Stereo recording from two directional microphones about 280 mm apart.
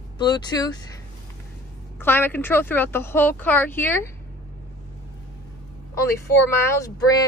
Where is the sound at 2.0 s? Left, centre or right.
Centre.